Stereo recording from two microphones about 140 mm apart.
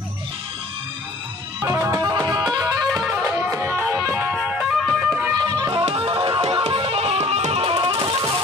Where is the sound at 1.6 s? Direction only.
20° right (ahead or behind).